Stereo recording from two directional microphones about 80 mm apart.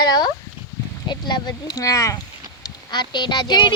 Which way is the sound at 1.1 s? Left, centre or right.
Left.